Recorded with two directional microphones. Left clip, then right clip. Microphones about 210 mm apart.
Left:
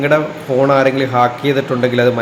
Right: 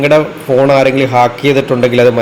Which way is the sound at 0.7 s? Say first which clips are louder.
Right 4 dB; 20° right (ahead or behind).